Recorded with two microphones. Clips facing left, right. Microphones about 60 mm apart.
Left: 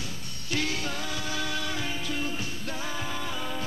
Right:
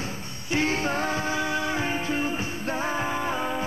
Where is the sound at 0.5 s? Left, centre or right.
Right.